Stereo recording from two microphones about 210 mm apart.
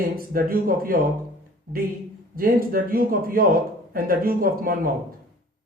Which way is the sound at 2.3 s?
45° right (ahead or behind).